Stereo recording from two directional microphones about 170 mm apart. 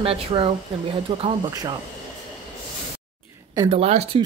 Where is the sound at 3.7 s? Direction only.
35° right (ahead or behind).